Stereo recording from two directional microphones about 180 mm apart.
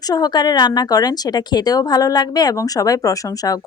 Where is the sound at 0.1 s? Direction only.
20° left (ahead or behind).